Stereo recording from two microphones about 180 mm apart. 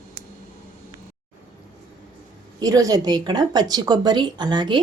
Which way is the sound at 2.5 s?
20° right (ahead or behind).